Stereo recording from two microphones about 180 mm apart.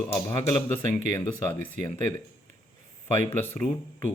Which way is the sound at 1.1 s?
15° left (ahead or behind).